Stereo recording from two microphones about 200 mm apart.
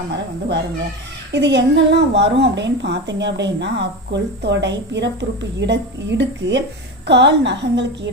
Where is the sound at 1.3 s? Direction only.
60° right (ahead or behind).